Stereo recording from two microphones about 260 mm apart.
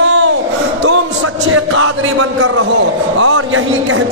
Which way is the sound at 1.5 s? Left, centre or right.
Right.